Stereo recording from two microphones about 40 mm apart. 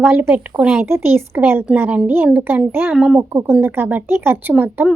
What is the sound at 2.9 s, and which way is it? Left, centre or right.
Speech, centre.